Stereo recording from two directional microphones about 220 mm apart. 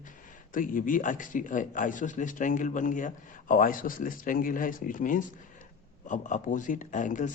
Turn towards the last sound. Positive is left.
turn(degrees=35)  # may be behind; listen again after turning